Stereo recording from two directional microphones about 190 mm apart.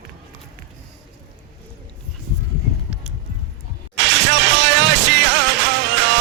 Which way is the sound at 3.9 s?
70° right (ahead or behind).